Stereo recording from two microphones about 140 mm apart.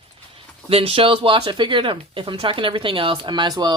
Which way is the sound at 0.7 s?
40° right (ahead or behind).